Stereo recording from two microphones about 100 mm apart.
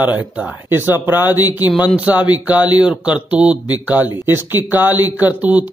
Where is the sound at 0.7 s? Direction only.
20° right (ahead or behind).